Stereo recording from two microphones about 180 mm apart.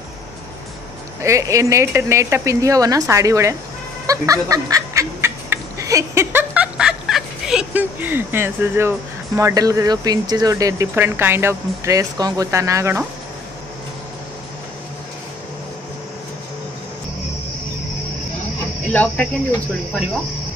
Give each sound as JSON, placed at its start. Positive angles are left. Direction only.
{"t": 1.2, "sound": "speech", "side_deg": -15}
{"t": 4.1, "sound": "laughter", "side_deg": -20}